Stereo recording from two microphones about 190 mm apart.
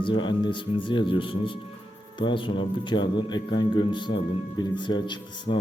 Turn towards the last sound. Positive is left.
turn(degrees=25)  # may be behind; listen again after turning